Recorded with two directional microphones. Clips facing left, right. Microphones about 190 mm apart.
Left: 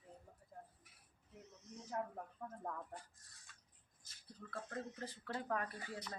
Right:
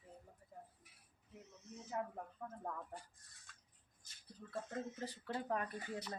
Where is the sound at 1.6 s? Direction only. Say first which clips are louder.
Even; 5° right (ahead or behind).